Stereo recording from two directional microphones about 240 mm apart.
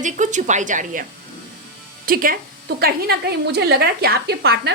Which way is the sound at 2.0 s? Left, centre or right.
Right.